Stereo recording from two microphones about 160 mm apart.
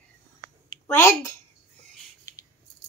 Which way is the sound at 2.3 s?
20° left (ahead or behind).